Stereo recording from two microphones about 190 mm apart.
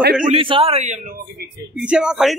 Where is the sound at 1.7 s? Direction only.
5° right (ahead or behind).